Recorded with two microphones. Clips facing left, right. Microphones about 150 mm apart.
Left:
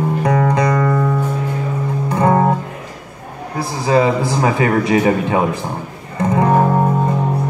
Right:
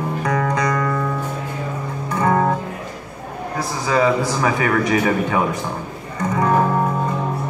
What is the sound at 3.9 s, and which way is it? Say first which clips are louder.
A man's voice: left 3 dB; 30° left (ahead or behind).